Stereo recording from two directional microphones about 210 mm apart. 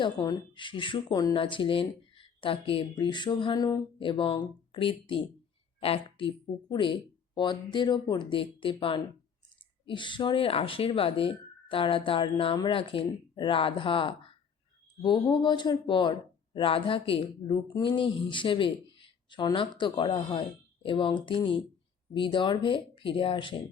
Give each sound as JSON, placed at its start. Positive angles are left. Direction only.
{"t": 0.0, "sound": "speech", "side_deg": 20}